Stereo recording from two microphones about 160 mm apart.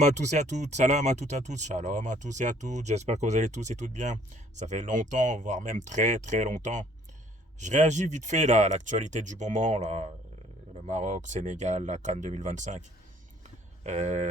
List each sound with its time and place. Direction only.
0.0 s speech: 45° right (ahead or behind)
13.8 s speech: 45° right (ahead or behind)